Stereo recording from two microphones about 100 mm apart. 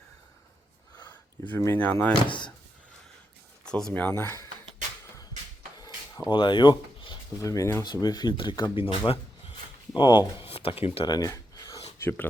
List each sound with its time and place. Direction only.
0.9 s speech: 20° left (ahead or behind)
3.7 s speech: 10° left (ahead or behind)
4.0 s speech: 25° left (ahead or behind)
6.3 s speech: 55° left (ahead or behind)
7.4 s speech: 35° left (ahead or behind)
8.0 s speech: 45° left (ahead or behind); by 9.6 s 65° left (ahead or behind)
9.9 s speech: 50° left (ahead or behind)
10.4 s speech: 70° left (ahead or behind)
11.0 s a sound: 40° left (ahead or behind)
11.9 s speech: 20° left (ahead or behind)